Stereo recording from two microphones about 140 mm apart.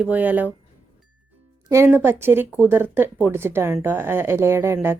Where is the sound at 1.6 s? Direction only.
20° right (ahead or behind).